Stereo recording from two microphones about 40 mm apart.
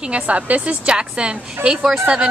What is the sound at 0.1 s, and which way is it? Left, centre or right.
Speech, right.